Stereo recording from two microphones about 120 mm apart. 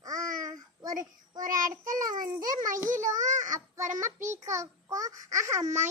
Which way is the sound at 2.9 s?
90° right.